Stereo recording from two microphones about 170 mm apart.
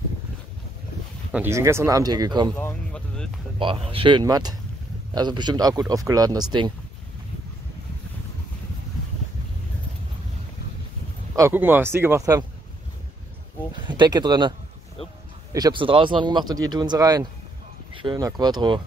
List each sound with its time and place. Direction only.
1.3 s speech: 15° right (ahead or behind)
2.5 s a sound: 10° left (ahead or behind)
3.5 s speech: 30° right (ahead or behind)
11.3 s speech: 15° right (ahead or behind)
13.8 s speech: 25° right (ahead or behind)
15.5 s speech: 25° right (ahead or behind)